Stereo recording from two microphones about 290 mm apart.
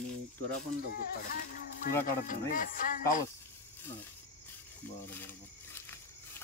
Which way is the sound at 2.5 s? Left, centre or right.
Left.